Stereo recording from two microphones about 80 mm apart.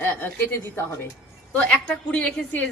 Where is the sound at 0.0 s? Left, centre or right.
Left.